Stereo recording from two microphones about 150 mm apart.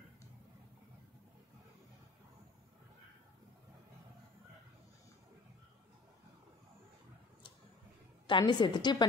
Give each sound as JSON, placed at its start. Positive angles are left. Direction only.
{"t": 8.3, "sound": "a woman's voice", "side_deg": 30}